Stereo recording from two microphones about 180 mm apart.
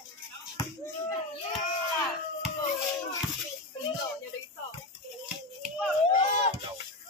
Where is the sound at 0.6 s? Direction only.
20° left (ahead or behind).